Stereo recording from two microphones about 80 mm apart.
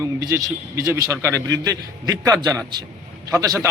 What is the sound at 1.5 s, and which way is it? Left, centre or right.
A man's voice, right.